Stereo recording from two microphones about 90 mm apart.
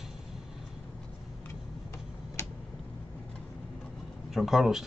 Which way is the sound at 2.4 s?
30° left (ahead or behind).